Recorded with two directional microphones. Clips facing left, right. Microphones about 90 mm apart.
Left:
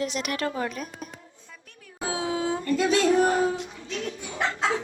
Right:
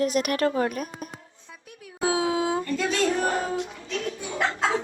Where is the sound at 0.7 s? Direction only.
50° right (ahead or behind).